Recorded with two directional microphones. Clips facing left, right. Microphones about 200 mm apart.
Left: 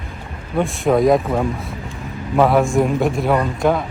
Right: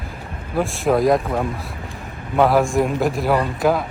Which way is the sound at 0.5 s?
Centre (ahead or behind).